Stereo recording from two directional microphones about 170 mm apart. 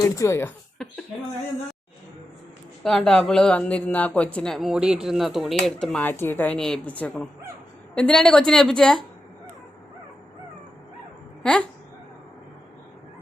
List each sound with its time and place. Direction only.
0.0 s speech: 15° left (ahead or behind)
0.8 s a sound: centre (ahead or behind)
2.8 s speech: 5° left (ahead or behind)